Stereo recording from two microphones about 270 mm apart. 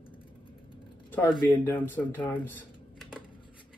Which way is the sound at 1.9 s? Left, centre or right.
Centre.